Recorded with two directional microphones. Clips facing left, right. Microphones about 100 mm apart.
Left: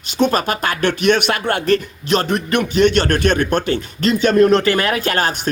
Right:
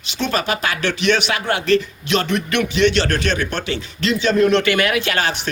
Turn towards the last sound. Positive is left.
turn(degrees=45)  # may be behind; listen again after turning